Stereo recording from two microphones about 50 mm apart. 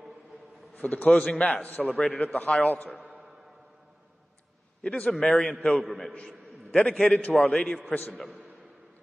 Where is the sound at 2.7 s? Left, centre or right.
Left.